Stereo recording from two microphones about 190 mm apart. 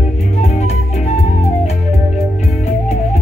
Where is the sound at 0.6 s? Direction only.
35° left (ahead or behind).